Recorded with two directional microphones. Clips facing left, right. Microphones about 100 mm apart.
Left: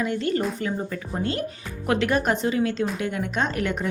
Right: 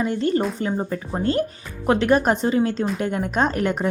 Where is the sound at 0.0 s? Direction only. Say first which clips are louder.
Right 3 dB; 30° right (ahead or behind).